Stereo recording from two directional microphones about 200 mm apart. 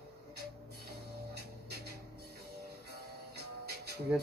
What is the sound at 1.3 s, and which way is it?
Music, 55° right (ahead or behind).